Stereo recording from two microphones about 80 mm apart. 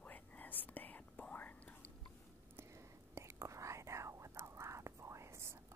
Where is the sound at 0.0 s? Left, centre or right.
Left.